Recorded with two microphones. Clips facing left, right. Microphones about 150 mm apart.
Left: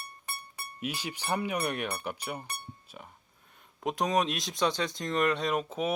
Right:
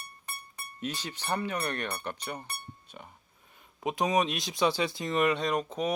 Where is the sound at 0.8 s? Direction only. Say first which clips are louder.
Left 1 dB; 10° left (ahead or behind).